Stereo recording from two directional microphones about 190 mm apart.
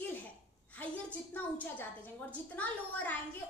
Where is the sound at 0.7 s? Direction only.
10° left (ahead or behind).